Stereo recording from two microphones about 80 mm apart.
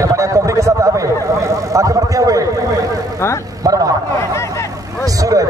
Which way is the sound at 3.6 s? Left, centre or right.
Right.